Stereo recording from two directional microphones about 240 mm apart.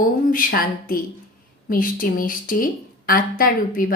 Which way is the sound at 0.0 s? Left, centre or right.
Left.